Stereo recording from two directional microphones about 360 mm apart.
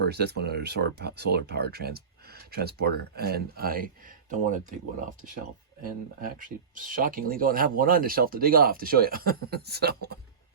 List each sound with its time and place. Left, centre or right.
0.0 s speech: right